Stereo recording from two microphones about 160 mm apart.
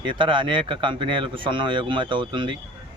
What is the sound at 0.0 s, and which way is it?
A man's voice, 30° right (ahead or behind).